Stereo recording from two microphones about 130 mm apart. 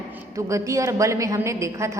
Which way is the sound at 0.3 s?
25° right (ahead or behind).